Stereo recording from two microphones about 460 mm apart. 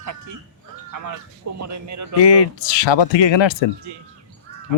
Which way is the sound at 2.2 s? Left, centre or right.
Left.